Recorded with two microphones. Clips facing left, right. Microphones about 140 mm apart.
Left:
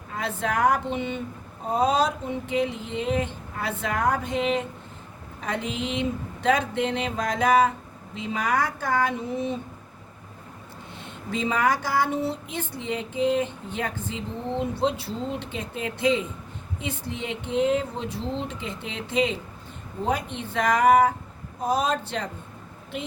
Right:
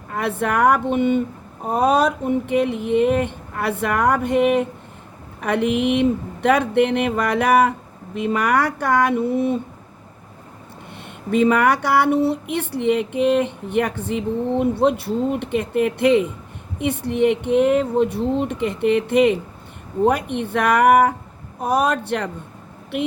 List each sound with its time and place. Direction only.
0.1 s speech: 60° right (ahead or behind)
11.0 s speech: 60° right (ahead or behind)